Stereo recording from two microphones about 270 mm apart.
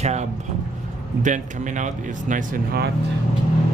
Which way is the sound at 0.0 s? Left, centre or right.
Right.